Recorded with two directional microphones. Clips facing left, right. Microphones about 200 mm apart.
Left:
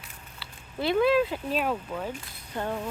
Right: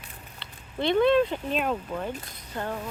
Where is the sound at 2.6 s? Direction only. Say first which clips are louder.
Left 1 dB; 15° left (ahead or behind).